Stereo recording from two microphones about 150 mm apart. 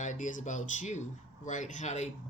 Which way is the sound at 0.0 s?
55° left (ahead or behind).